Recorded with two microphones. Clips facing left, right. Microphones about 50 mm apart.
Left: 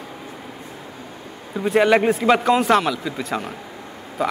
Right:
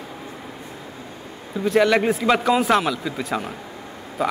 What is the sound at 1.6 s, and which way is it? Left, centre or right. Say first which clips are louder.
Speech: left 1 dB; centre.